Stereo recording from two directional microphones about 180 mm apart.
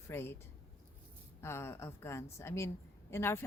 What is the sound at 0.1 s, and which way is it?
Speech, 15° left (ahead or behind).